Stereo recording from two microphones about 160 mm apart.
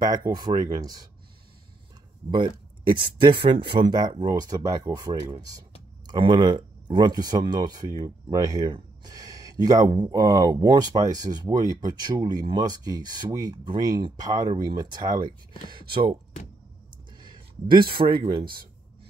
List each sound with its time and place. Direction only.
0.3 s speech: 25° right (ahead or behind)
2.3 s speech: 30° right (ahead or behind)
17.2 s a sound: 30° right (ahead or behind)
17.9 s speech: 30° right (ahead or behind)